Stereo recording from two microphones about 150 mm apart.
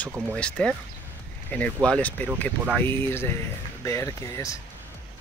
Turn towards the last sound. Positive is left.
turn(degrees=20)  # may be behind; listen again after turning